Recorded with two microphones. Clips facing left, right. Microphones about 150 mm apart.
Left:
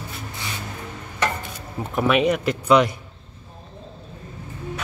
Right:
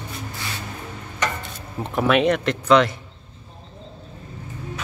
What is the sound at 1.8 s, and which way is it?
Speech, centre (ahead or behind).